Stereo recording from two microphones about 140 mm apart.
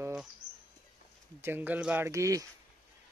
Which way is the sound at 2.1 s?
20° right (ahead or behind).